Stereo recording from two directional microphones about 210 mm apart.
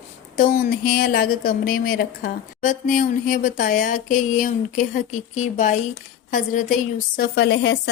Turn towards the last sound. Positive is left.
turn(degrees=55)  # may be behind; listen again after turning